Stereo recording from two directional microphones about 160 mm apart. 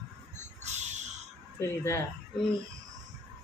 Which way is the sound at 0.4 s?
45° right (ahead or behind).